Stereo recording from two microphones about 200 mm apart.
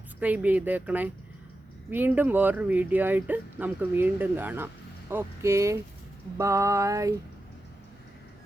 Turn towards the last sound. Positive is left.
turn(degrees=-15)  # may be behind; listen again after turning